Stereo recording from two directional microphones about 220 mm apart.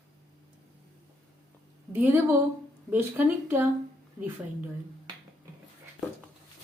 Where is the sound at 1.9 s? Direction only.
10° right (ahead or behind).